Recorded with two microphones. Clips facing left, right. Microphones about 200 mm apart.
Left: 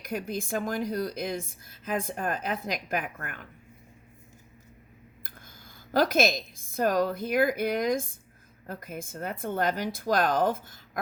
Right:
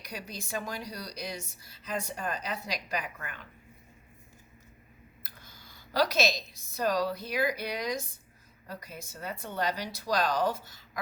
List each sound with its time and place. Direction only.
0.0 s a woman's voice: 50° left (ahead or behind)
5.2 s a woman's voice: 50° left (ahead or behind)